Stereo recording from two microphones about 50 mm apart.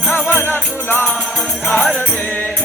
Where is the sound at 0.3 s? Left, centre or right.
Left.